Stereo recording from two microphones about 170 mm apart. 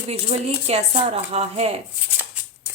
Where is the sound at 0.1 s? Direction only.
35° right (ahead or behind).